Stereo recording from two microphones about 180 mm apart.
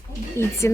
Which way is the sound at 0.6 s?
15° left (ahead or behind).